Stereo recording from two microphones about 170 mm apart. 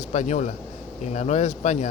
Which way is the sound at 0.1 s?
45° left (ahead or behind).